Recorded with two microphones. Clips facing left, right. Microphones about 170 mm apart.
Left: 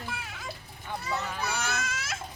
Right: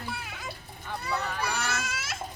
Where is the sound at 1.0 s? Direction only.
Centre (ahead or behind).